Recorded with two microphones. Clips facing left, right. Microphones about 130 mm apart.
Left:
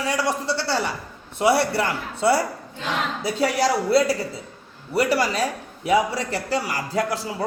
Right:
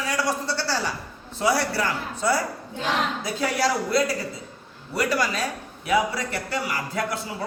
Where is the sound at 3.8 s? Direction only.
30° left (ahead or behind).